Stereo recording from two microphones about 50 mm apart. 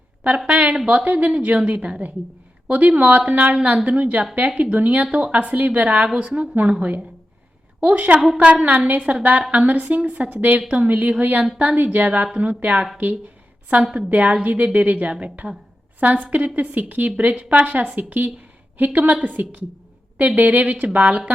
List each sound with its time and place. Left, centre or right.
0.3 s a woman's voice: right